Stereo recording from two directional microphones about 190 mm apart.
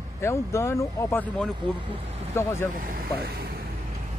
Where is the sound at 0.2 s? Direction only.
15° left (ahead or behind).